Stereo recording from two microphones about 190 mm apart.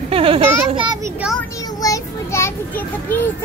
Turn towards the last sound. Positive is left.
turn(degrees=10)  # may be behind; listen again after turning